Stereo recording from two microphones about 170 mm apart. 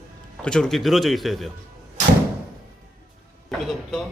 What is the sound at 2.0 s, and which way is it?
Door, 45° right (ahead or behind).